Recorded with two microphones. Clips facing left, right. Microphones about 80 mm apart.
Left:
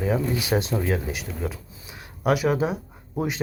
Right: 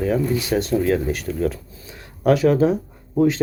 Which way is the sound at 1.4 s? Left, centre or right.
Centre.